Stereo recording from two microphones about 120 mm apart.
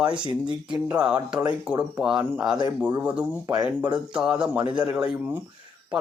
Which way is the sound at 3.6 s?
10° right (ahead or behind).